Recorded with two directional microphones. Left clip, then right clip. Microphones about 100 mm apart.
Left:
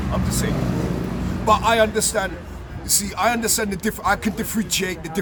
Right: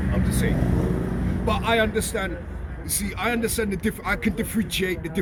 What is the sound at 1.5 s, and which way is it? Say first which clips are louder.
A man's voice: left 6 dB; 55° left (ahead or behind).